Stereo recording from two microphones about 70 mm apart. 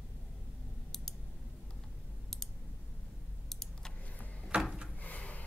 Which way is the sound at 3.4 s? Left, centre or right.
Centre.